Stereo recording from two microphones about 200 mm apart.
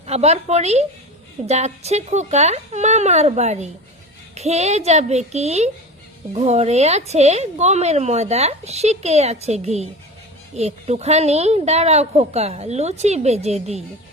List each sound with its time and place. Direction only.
0.0 s a woman's voice: 35° right (ahead or behind)